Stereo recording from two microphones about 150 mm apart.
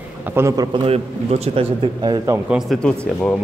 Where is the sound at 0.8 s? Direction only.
45° right (ahead or behind).